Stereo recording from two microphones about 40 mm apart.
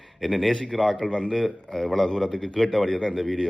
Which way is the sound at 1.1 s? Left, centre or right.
Centre.